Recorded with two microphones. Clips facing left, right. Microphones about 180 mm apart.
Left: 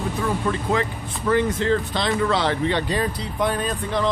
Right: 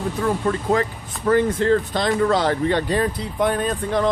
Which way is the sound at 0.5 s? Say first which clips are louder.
Right 3 dB; 45° right (ahead or behind).